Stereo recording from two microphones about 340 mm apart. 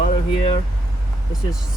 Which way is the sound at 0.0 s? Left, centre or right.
Centre.